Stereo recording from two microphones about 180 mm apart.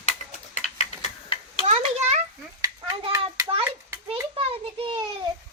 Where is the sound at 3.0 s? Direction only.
25° right (ahead or behind).